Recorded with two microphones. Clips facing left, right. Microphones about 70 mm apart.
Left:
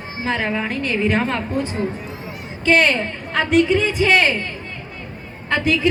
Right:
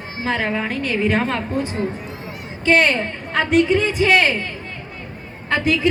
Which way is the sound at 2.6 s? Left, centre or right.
Right.